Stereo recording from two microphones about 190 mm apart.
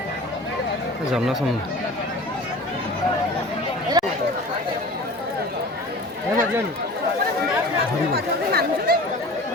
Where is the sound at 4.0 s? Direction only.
20° right (ahead or behind).